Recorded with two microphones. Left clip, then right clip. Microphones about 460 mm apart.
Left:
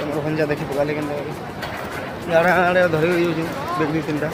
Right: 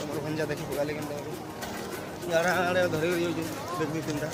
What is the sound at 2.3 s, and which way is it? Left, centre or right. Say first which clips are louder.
Speech: left 10 dB; right.